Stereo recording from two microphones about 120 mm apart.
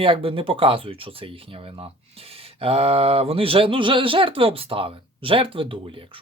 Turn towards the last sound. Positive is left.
turn(degrees=-45)  # may be behind; listen again after turning